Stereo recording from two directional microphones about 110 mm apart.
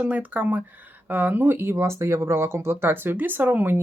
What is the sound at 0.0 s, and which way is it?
Speech, 15° right (ahead or behind).